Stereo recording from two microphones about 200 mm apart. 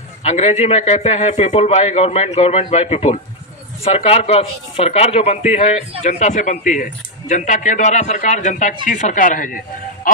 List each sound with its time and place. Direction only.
0.2 s speech: 35° left (ahead or behind)